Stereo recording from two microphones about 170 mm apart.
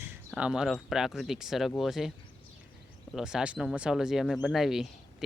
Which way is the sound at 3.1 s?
5° right (ahead or behind).